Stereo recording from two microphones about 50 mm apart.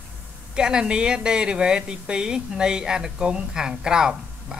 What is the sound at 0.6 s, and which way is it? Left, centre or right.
A woman's voice, centre.